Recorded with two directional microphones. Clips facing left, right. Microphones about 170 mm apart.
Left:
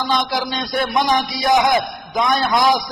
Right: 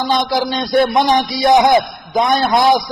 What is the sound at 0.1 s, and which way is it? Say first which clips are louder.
A man's voice: right 5 dB; 30° right (ahead or behind).